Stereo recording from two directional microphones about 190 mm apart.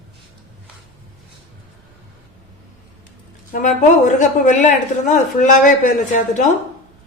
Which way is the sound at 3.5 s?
40° left (ahead or behind).